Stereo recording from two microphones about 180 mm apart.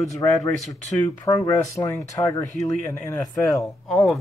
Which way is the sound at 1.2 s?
20° left (ahead or behind).